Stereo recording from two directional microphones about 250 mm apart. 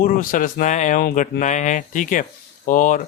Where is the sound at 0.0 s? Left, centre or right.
Left.